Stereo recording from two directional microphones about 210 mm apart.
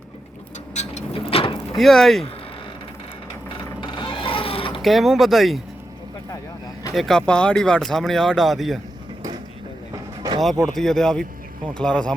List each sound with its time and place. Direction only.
0.7 s vehicle: 35° left (ahead or behind)
1.7 s speech: centre (ahead or behind)
3.8 s a sound: 25° left (ahead or behind)
4.8 s speech: centre (ahead or behind)
6.9 s speech: centre (ahead or behind)
10.4 s speech: centre (ahead or behind)